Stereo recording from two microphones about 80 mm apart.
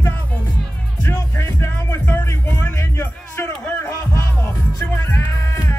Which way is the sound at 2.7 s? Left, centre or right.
Left.